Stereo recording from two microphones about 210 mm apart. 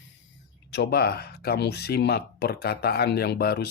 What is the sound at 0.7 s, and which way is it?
Speech, 50° left (ahead or behind).